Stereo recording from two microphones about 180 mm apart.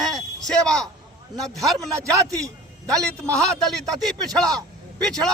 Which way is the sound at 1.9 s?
15° right (ahead or behind).